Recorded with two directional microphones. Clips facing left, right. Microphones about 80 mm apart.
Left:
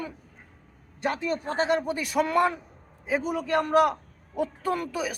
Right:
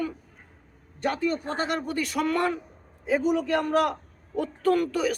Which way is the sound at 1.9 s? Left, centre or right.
Centre.